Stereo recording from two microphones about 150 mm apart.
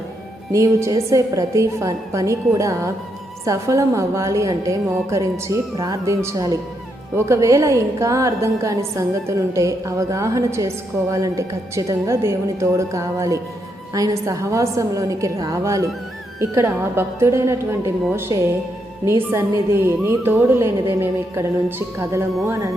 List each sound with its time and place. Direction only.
0.5 s a woman's voice: 20° right (ahead or behind)